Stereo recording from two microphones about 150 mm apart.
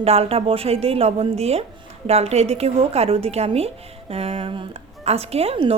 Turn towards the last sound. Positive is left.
turn(degrees=-40)  # may be behind; listen again after turning